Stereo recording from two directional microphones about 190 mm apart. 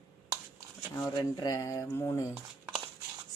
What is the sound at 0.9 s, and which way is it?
Speech, 20° left (ahead or behind).